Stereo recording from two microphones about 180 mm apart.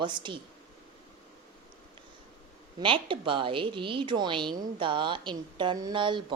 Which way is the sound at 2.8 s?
30° right (ahead or behind).